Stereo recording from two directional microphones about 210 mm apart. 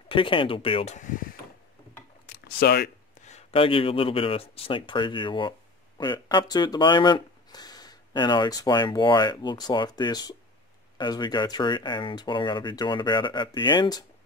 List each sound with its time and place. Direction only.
0.1 s speech: 25° left (ahead or behind)
2.4 s speech: 50° left (ahead or behind)
3.3 s speech: 30° left (ahead or behind)